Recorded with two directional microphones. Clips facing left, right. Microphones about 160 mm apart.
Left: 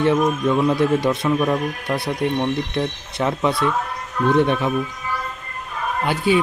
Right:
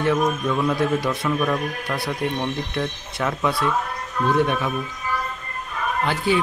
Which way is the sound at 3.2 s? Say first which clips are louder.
Left 3 dB; 25° left (ahead or behind).